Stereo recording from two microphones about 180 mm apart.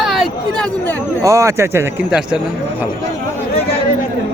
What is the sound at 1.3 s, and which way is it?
Speech, 15° right (ahead or behind).